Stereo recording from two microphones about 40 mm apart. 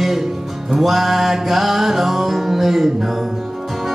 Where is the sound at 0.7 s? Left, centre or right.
Centre.